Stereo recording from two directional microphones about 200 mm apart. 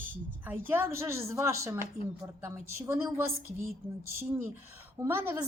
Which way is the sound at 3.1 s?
15° right (ahead or behind).